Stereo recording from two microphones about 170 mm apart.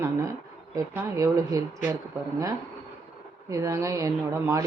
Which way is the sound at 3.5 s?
20° right (ahead or behind).